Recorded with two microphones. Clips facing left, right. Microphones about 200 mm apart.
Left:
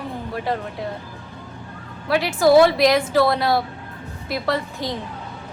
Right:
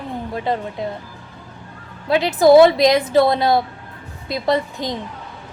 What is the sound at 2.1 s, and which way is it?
A woman's voice, 20° right (ahead or behind).